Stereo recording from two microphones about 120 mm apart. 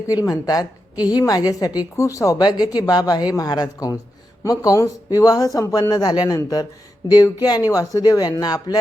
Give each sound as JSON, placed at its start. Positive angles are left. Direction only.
{"t": 0.3, "sound": "a woman's voice", "side_deg": 30}